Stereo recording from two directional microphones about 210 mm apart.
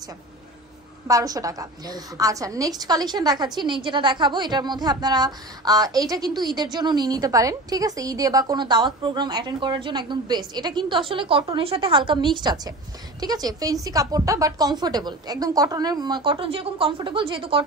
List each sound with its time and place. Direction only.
1.0 s a woman's voice: 15° right (ahead or behind)